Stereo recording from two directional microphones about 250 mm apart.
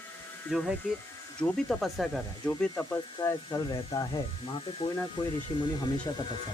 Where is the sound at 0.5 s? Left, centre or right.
Centre.